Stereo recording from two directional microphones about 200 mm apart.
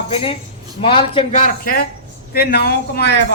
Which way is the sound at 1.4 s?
45° left (ahead or behind).